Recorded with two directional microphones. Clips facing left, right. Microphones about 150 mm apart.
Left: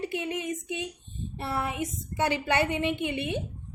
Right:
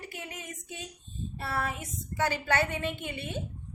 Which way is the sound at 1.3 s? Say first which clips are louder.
Left 2 dB; 20° left (ahead or behind).